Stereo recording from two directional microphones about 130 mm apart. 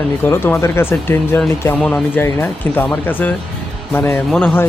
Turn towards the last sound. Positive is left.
turn(degrees=5)  # may be behind; listen again after turning